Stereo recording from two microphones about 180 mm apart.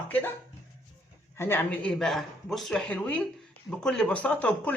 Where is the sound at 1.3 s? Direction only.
15° left (ahead or behind).